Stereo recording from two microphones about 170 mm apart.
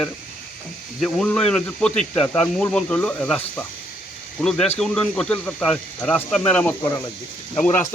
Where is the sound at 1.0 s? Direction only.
5° left (ahead or behind).